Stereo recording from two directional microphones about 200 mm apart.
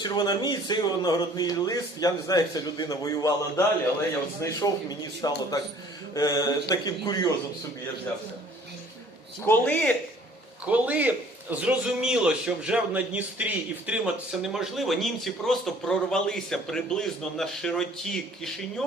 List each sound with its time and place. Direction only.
0.0 s speech: 20° left (ahead or behind)
4.4 s speech: 15° left (ahead or behind)
9.5 s speech: 10° left (ahead or behind)
10.7 s a man's voice: 10° right (ahead or behind)